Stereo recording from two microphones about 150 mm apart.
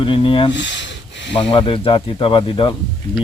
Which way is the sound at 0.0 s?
35° left (ahead or behind).